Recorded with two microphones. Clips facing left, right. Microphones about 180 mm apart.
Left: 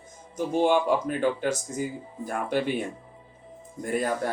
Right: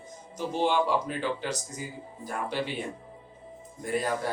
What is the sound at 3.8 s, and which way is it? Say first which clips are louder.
Speech: left 2 dB; 50° left (ahead or behind).